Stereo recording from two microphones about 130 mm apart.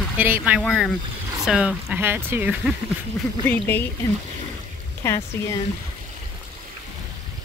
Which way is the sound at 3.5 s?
15° left (ahead or behind).